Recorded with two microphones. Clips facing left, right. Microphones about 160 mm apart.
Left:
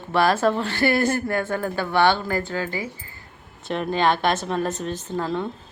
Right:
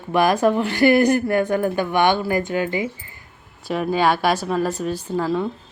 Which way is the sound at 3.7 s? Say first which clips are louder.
Right 2 dB; 5° right (ahead or behind).